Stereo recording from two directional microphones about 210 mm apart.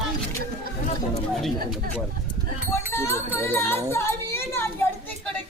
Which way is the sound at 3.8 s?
10° left (ahead or behind).